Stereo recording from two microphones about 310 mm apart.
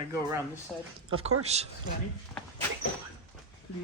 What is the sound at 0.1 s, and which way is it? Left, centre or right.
Speech, centre.